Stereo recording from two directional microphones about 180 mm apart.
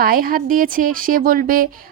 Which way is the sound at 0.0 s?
55° right (ahead or behind).